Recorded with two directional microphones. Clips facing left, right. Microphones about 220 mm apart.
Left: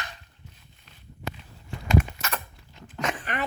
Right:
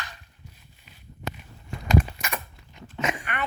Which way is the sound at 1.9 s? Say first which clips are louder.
Right 1 dB; 30° right (ahead or behind).